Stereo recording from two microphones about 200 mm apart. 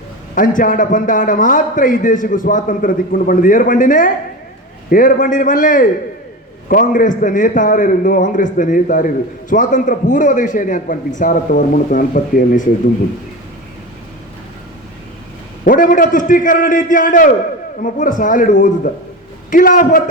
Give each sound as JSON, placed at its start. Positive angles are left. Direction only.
{"t": 0.3, "sound": "a man's voice", "side_deg": 45}
{"t": 15.6, "sound": "a man's voice", "side_deg": 45}